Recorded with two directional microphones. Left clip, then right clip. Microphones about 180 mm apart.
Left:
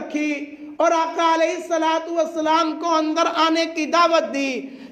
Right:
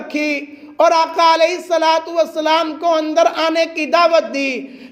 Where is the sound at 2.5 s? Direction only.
15° right (ahead or behind).